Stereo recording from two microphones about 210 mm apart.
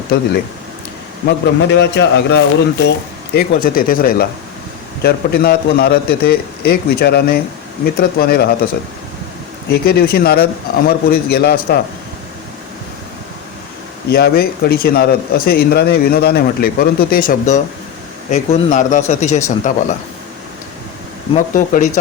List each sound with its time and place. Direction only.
1.3 s speech: 55° left (ahead or behind)
3.3 s speech: 45° left (ahead or behind)
9.8 s speech: 45° left (ahead or behind)
14.1 s speech: 50° left (ahead or behind)
21.3 s speech: 40° left (ahead or behind)